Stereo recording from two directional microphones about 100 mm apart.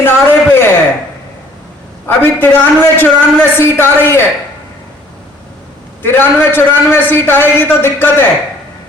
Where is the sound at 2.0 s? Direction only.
20° left (ahead or behind).